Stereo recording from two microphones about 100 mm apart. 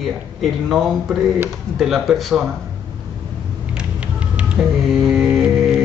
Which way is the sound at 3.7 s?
10° right (ahead or behind).